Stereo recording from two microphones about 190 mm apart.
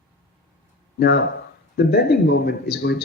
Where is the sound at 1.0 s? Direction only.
60° left (ahead or behind).